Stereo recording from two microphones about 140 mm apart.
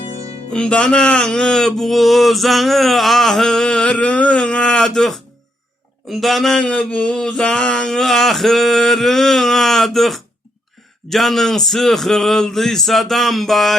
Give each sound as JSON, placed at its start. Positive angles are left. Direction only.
{"t": 0.0, "sound": "music", "side_deg": 45}
{"t": 0.5, "sound": "speech", "side_deg": 5}